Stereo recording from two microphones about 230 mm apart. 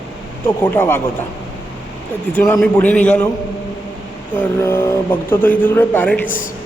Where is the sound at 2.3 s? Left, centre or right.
Centre.